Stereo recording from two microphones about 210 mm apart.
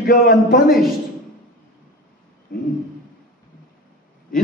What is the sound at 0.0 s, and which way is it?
Speech, 45° left (ahead or behind).